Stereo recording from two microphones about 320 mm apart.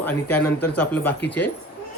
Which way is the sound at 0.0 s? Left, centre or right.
Centre.